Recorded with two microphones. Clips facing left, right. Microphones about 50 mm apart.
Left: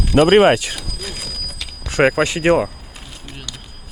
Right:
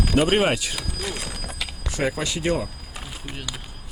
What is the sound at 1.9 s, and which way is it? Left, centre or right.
Speech, left.